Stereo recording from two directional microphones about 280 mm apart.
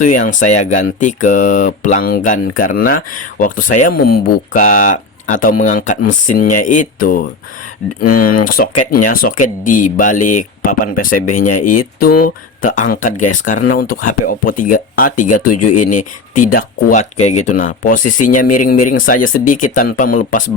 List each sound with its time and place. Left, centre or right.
0.1 s speech: left
18.4 s speech: left
18.9 s speech: left